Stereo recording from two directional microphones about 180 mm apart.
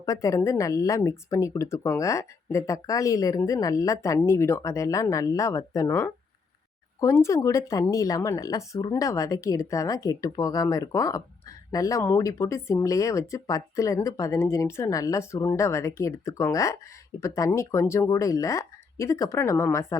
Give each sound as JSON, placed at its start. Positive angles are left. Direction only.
{"t": 0.0, "sound": "speech", "side_deg": 20}